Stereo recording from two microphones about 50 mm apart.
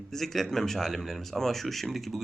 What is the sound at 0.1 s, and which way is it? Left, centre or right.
Speech, centre.